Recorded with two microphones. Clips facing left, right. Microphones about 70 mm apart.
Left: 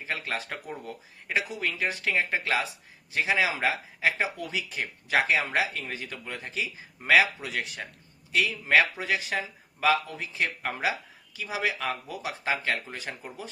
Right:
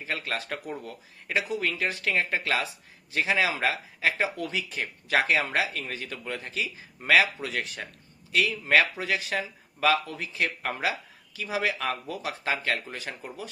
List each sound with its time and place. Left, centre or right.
0.1 s a man's voice: centre